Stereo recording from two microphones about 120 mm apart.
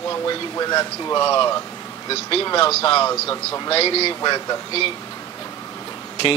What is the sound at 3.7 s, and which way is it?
Speech, 55° left (ahead or behind).